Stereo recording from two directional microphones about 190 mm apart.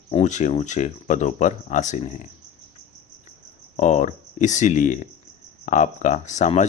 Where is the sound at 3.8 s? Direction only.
40° left (ahead or behind).